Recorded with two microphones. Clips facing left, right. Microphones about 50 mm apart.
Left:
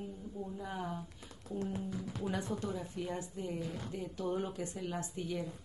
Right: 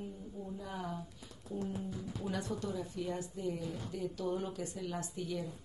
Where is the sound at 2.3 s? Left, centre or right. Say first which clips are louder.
Even; left.